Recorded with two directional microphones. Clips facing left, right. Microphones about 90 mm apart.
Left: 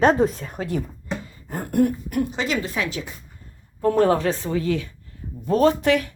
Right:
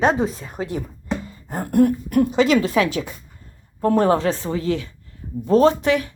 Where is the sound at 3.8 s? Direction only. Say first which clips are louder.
Right 1 dB; 35° right (ahead or behind).